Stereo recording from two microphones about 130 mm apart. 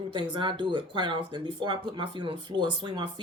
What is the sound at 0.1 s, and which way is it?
Speech, 35° right (ahead or behind).